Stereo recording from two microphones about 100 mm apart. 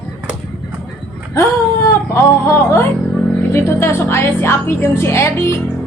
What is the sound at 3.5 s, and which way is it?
A woman's voice, 25° left (ahead or behind).